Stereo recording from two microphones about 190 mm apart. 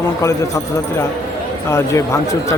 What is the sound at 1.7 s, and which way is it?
Speech, 15° left (ahead or behind).